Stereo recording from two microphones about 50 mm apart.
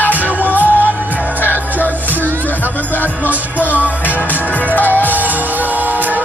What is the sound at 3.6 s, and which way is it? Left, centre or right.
Music, right.